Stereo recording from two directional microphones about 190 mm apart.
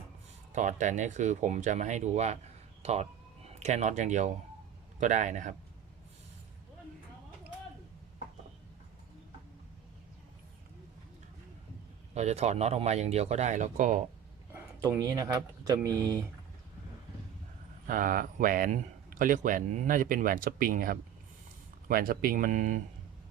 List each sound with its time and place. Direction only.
0.5 s speech: 40° right (ahead or behind)
12.1 s speech: 35° right (ahead or behind)
14.5 s speech: 15° right (ahead or behind)
17.8 s speech: 45° right (ahead or behind)